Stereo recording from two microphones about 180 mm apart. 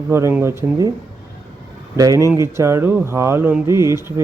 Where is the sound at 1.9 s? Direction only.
20° right (ahead or behind).